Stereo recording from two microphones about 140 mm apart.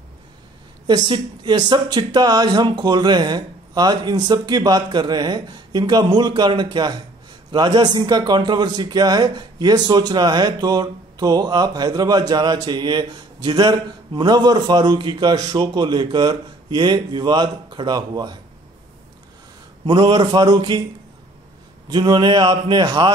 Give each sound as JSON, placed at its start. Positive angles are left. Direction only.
{"t": 0.8, "sound": "a man's voice", "side_deg": -35}
{"t": 19.9, "sound": "a man's voice", "side_deg": -35}
{"t": 21.8, "sound": "a man's voice", "side_deg": -30}